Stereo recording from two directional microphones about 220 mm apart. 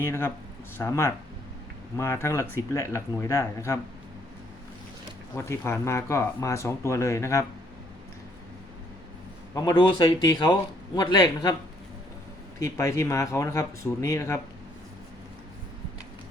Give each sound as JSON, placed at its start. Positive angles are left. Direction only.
{"t": 0.0, "sound": "speech", "side_deg": 10}
{"t": 5.5, "sound": "speech", "side_deg": 10}
{"t": 9.6, "sound": "a man's voice", "side_deg": 15}
{"t": 12.5, "sound": "speech", "side_deg": 15}